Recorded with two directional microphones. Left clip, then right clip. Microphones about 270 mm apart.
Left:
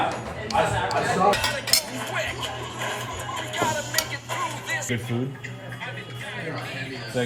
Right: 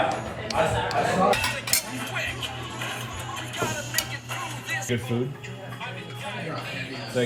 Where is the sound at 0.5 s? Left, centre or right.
Left.